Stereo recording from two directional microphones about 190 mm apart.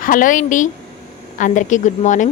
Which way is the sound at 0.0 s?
45° left (ahead or behind).